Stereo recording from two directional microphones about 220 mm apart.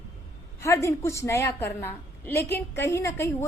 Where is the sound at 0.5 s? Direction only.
15° left (ahead or behind).